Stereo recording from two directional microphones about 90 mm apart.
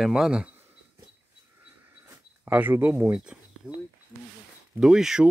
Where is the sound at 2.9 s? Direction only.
10° right (ahead or behind).